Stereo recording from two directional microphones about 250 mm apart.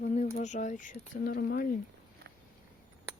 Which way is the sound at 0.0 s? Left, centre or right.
Left.